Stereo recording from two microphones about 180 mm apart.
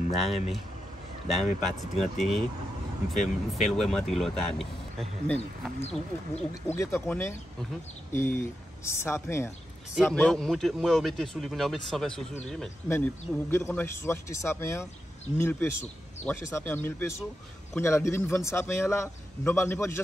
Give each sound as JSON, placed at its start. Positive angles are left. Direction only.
{"t": 0.2, "sound": "speech", "side_deg": 0}
{"t": 3.5, "sound": "speech", "side_deg": 0}
{"t": 5.4, "sound": "speech", "side_deg": 35}
{"t": 6.7, "sound": "a man's voice", "side_deg": 10}